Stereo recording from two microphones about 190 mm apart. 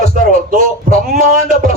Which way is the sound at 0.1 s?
45° right (ahead or behind).